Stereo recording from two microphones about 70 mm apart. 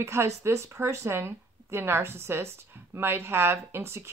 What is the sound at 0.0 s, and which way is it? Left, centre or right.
Speech, right.